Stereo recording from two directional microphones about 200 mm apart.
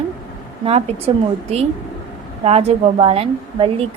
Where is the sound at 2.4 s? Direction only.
30° right (ahead or behind).